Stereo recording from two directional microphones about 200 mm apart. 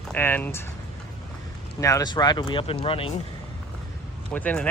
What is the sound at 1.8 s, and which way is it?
A man's voice, 15° left (ahead or behind).